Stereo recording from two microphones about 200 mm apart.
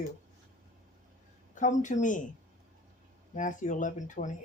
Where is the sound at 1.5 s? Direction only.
40° left (ahead or behind).